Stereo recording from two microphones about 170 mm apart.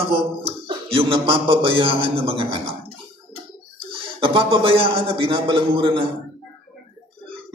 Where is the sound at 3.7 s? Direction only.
30° right (ahead or behind).